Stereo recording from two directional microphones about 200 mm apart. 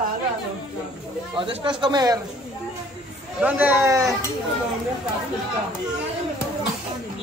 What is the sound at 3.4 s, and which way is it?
Speech, 10° right (ahead or behind).